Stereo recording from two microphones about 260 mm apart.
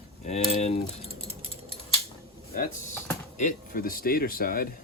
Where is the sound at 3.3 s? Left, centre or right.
Left.